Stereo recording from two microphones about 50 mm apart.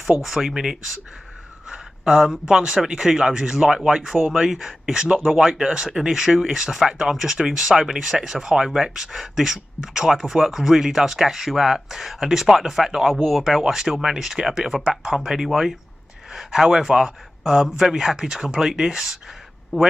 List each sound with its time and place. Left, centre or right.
0.0 s speech: centre
1.7 s speech: centre
5.0 s speech: centre